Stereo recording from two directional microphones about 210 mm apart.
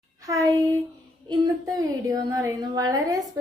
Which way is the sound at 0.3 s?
15° right (ahead or behind).